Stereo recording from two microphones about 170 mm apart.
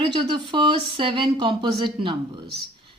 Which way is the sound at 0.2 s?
30° right (ahead or behind).